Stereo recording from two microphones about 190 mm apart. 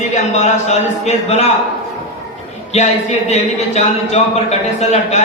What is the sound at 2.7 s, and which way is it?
A man's voice, 35° left (ahead or behind).